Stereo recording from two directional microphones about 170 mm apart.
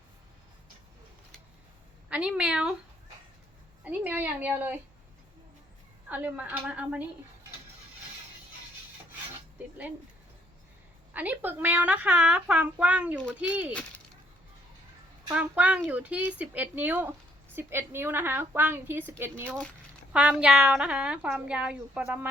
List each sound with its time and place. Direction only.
2.0 s a woman's voice: 5° right (ahead or behind)
3.8 s a woman's voice: 10° right (ahead or behind)
6.1 s a woman's voice: 10° right (ahead or behind)
11.1 s a woman's voice: 10° right (ahead or behind)
15.3 s a woman's voice: 5° right (ahead or behind)
19.5 s a woman's voice: 5° left (ahead or behind)
20.1 s a woman's voice: 5° right (ahead or behind)